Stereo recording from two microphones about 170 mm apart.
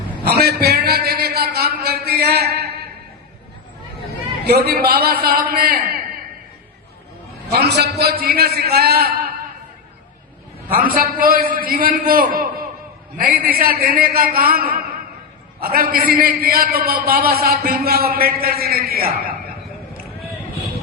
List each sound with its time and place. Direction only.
0.3 s a sound: 70° right (ahead or behind)
4.4 s a man's voice: 70° right (ahead or behind); by 6.0 s 50° right (ahead or behind)
7.5 s a man's voice: 75° right (ahead or behind)
10.7 s a man's voice: 55° right (ahead or behind)